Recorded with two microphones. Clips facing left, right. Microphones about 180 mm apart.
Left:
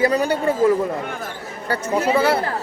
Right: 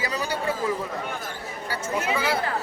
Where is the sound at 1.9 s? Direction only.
35° left (ahead or behind).